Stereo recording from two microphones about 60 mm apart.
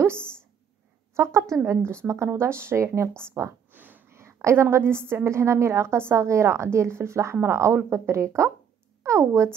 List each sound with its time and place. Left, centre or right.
1.1 s a woman's voice: right
3.7 s a sound: right
4.1 s a woman's voice: right